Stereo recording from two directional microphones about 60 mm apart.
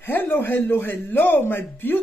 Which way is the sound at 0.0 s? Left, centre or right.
Left.